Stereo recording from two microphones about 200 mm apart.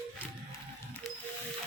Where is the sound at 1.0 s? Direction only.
Centre (ahead or behind).